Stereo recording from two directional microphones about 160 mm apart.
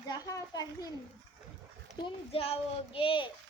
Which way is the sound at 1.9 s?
35° left (ahead or behind).